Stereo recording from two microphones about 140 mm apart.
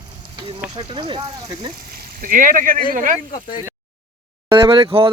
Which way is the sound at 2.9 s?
70° right (ahead or behind).